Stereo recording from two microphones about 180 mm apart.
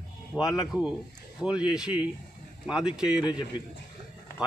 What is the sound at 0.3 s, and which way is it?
A man's voice, centre (ahead or behind).